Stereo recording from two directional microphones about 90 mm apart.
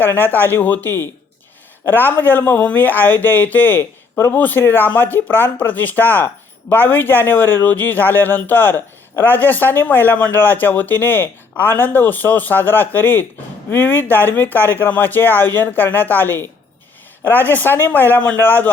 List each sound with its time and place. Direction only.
0.0 s speech: 25° left (ahead or behind)